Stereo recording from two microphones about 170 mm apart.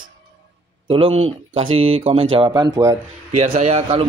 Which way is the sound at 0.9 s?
35° right (ahead or behind).